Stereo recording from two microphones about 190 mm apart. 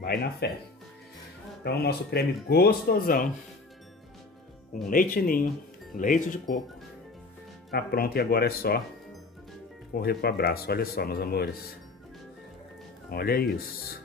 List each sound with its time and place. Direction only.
0.0 s speech: 55° left (ahead or behind)
1.6 s speech: 55° left (ahead or behind)
4.8 s speech: 45° left (ahead or behind)
7.7 s speech: 55° left (ahead or behind)
9.9 s speech: 55° left (ahead or behind)
13.1 s speech: 55° left (ahead or behind)